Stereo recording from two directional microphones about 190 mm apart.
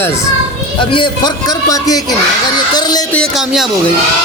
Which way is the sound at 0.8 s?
25° left (ahead or behind).